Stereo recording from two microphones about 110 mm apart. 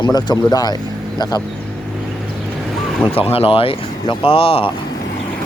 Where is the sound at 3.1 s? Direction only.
60° left (ahead or behind).